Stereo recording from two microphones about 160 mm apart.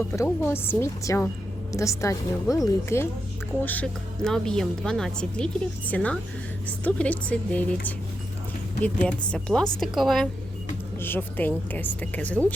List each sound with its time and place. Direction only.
0.1 s a woman's voice: 15° left (ahead or behind)
8.8 s a woman's voice: 10° left (ahead or behind)
11.0 s a woman's voice: 10° left (ahead or behind)